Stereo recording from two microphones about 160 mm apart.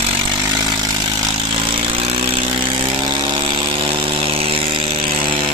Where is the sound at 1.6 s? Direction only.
30° right (ahead or behind).